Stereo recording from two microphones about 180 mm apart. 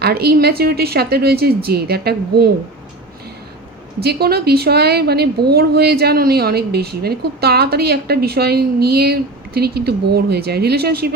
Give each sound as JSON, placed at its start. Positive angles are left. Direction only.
{"t": 0.0, "sound": "a woman's voice", "side_deg": -60}
{"t": 4.0, "sound": "a woman's voice", "side_deg": -60}